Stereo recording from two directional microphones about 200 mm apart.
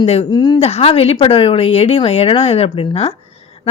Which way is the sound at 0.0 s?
30° left (ahead or behind).